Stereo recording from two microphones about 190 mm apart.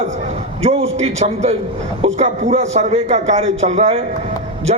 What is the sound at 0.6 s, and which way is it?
A man's voice, 35° right (ahead or behind).